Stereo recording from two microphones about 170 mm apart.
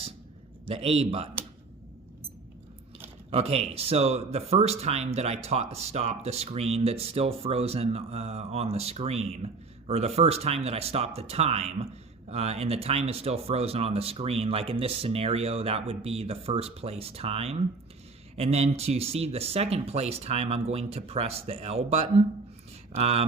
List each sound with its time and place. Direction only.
0.7 s speech: 35° right (ahead or behind)
3.2 s speech: 35° right (ahead or behind)